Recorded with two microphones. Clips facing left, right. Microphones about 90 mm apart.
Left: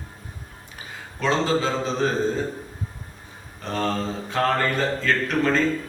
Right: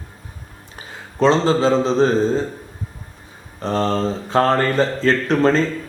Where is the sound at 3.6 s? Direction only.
30° right (ahead or behind).